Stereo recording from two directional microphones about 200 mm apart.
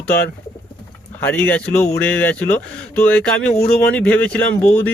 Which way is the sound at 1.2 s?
10° left (ahead or behind).